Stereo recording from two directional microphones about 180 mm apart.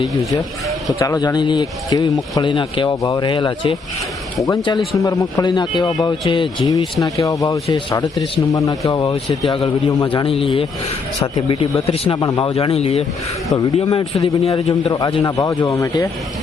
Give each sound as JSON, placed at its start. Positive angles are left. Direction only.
{"t": 0.9, "sound": "speech", "side_deg": 20}
{"t": 12.5, "sound": "speech", "side_deg": 35}